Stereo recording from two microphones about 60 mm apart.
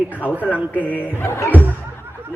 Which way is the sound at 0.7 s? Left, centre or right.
Left.